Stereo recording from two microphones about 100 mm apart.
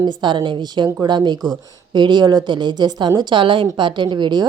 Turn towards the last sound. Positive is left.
turn(degrees=-50)  # may be behind; listen again after turning